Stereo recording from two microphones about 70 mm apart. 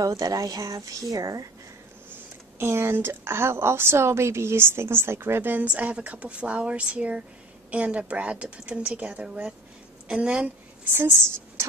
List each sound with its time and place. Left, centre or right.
0.0 s speech: right
2.6 s a woman's voice: right; by 10.9 s centre
10.9 s a woman's voice: right